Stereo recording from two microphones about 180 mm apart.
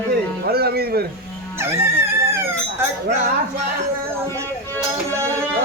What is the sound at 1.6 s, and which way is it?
Chicken, 15° right (ahead or behind).